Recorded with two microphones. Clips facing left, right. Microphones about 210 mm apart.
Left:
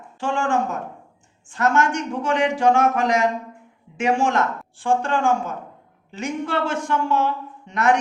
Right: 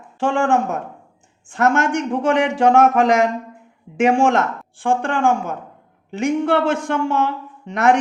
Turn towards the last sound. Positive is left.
turn(degrees=-55)  # may be behind; listen again after turning